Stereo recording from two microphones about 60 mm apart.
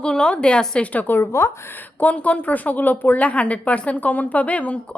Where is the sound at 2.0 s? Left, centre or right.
Left.